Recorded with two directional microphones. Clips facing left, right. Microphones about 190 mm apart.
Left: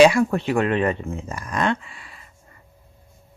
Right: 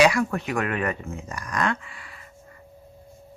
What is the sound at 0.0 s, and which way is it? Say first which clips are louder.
Speech: left 5 dB; 25° left (ahead or behind).